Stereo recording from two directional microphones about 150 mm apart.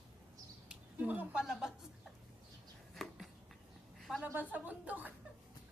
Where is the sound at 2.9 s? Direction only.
Centre (ahead or behind).